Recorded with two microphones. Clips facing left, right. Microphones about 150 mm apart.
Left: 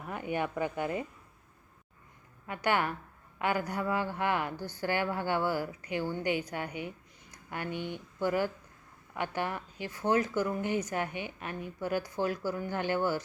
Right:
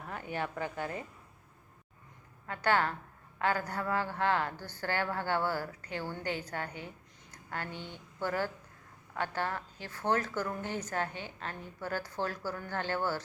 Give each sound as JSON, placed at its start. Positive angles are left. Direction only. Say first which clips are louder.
{"t": 0.1, "sound": "a woman's voice", "louder": "left 4 dB", "side_deg": 15}
{"t": 2.5, "sound": "a woman's voice", "louder": "even", "side_deg": 15}